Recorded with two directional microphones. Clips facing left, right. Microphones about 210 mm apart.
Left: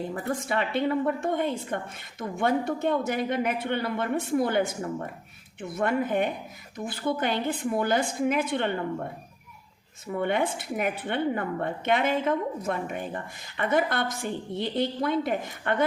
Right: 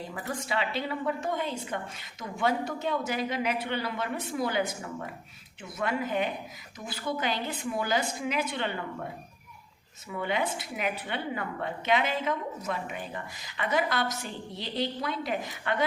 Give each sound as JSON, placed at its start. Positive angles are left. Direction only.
{"t": 0.1, "sound": "speech", "side_deg": 50}
{"t": 10.1, "sound": "speech", "side_deg": 55}